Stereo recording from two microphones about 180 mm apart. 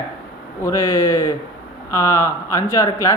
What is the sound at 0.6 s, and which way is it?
Speech, 15° left (ahead or behind).